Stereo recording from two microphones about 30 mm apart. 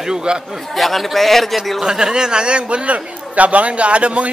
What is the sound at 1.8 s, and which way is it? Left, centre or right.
Speech, right.